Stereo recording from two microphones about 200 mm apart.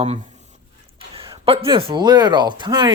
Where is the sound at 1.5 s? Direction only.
25° right (ahead or behind).